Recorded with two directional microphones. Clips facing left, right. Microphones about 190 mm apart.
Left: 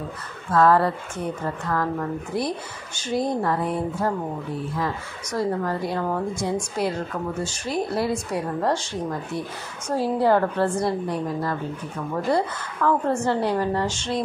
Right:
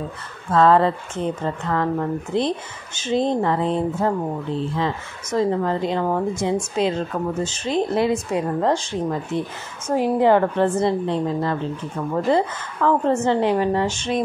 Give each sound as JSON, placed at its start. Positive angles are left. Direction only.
{"t": 0.5, "sound": "a woman's voice", "side_deg": -20}